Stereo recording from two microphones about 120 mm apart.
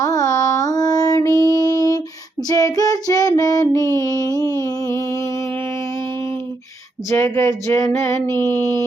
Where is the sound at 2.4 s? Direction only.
30° left (ahead or behind).